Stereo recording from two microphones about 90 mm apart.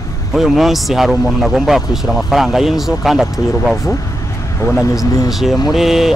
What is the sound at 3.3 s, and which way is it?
Speech, 40° left (ahead or behind).